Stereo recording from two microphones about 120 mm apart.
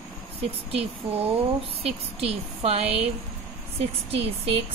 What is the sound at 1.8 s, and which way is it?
Speech, 55° right (ahead or behind).